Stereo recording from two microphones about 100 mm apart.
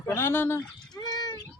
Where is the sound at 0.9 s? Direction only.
40° left (ahead or behind).